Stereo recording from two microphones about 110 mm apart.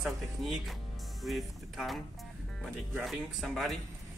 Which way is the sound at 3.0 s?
Centre (ahead or behind).